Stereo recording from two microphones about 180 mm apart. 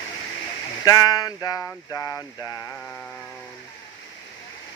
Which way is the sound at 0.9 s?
20° left (ahead or behind).